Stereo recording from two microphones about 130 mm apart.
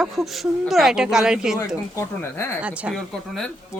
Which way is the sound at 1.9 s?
20° left (ahead or behind).